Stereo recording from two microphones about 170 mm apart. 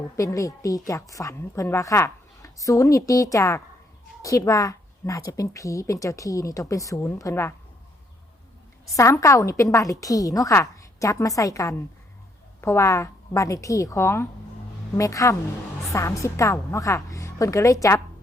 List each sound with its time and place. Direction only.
0.2 s a woman's voice: 20° left (ahead or behind)
9.0 s a woman's voice: 20° left (ahead or behind)